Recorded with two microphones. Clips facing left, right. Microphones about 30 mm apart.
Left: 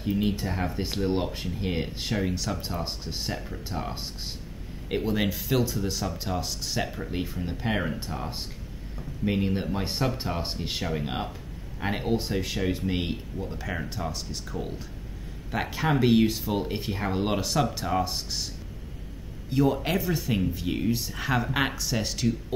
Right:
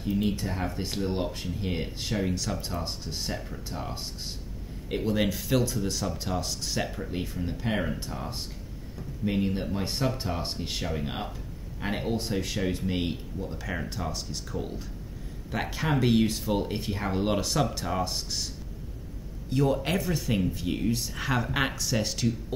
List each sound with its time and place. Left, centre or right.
0.0 s speech: centre
19.5 s speech: centre